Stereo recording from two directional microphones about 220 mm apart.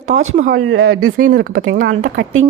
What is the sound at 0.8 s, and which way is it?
Speech, 65° right (ahead or behind).